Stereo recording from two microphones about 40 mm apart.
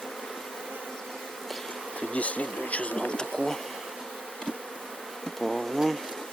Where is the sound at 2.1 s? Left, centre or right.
Left.